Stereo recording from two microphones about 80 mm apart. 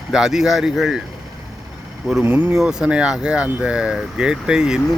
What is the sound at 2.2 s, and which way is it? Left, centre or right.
Speech, right.